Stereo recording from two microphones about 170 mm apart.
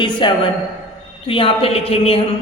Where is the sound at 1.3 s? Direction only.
30° left (ahead or behind).